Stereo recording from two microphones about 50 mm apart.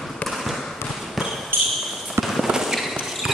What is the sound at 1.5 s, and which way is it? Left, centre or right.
Basketball bounce, right.